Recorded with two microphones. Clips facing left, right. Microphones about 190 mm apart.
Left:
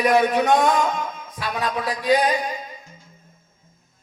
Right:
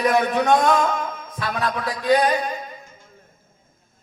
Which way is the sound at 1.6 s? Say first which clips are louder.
Left 1 dB; 20° left (ahead or behind).